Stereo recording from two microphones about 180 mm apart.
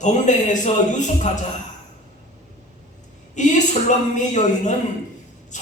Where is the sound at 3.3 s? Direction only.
40° left (ahead or behind).